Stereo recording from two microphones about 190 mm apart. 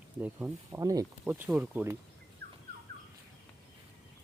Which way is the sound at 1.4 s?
5° right (ahead or behind).